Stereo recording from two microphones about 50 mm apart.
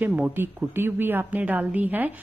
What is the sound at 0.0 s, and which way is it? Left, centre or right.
A woman's voice, right.